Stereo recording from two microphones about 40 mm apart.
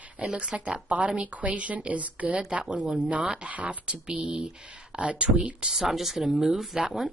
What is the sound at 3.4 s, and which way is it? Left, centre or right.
A woman's voice, right.